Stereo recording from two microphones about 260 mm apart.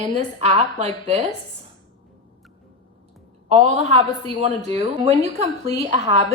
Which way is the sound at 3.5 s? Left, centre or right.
Right.